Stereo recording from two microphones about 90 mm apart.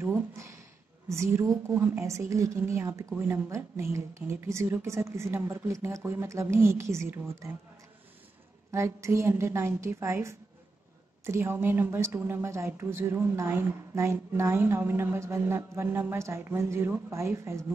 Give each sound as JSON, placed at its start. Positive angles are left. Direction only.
{"t": 0.0, "sound": "a sound", "side_deg": -30}
{"t": 1.0, "sound": "a woman's voice", "side_deg": -30}
{"t": 8.7, "sound": "a woman's voice", "side_deg": -35}